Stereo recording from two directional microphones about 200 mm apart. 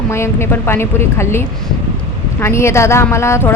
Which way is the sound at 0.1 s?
10° left (ahead or behind).